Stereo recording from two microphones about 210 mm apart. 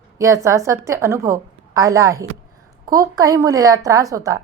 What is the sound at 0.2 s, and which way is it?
Speech, 15° right (ahead or behind).